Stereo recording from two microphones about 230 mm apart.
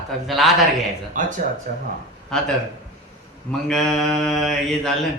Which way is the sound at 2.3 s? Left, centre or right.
Centre.